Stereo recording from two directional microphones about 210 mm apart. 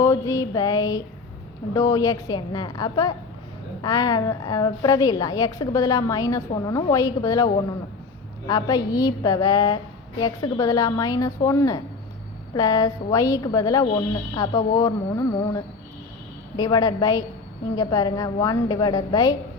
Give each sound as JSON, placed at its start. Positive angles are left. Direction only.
{"t": 0.0, "sound": "a woman's voice", "side_deg": 15}